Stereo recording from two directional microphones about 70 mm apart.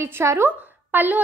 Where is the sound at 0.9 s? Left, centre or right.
Right.